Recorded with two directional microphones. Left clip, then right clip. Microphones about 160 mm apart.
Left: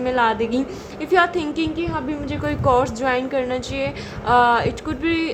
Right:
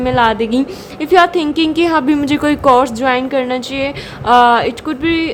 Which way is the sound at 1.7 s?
50° right (ahead or behind).